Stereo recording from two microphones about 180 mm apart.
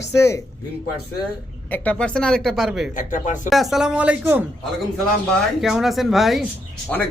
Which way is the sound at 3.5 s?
Centre (ahead or behind).